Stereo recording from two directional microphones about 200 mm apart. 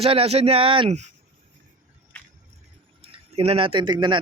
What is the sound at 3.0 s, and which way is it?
Speech, 30° right (ahead or behind).